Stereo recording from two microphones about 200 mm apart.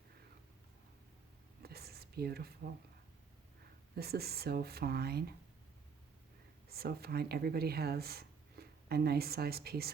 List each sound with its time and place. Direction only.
1.6 s whispering: 50° right (ahead or behind)
3.9 s speech: 50° right (ahead or behind)
6.7 s speech: 50° right (ahead or behind)